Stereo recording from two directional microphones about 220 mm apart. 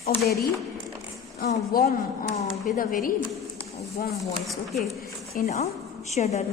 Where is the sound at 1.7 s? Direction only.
45° left (ahead or behind).